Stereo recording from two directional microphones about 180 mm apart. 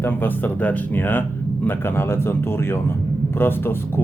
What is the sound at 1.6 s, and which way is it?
Speech, 10° left (ahead or behind).